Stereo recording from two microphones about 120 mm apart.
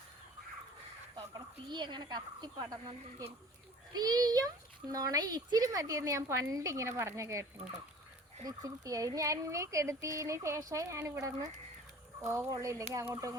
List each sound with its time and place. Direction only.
1.1 s a child's voice: 40° right (ahead or behind)
8.4 s a child's voice: 30° right (ahead or behind)